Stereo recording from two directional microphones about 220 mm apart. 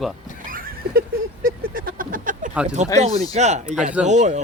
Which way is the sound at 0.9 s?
40° right (ahead or behind).